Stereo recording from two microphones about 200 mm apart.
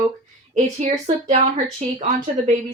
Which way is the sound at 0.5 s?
35° right (ahead or behind).